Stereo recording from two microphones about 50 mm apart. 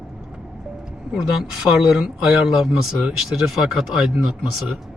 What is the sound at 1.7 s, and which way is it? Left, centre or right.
Speech, centre.